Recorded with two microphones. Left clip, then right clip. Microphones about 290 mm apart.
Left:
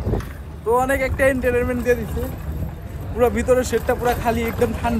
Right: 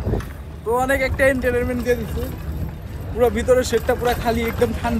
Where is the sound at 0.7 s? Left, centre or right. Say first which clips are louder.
Even; centre.